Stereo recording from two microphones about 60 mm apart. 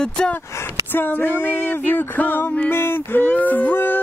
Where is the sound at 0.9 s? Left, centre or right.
Left.